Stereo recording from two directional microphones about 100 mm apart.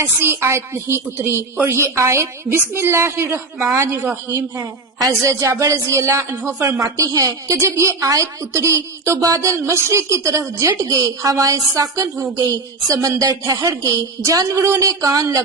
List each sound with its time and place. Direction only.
0.0 s a woman's voice: 25° right (ahead or behind)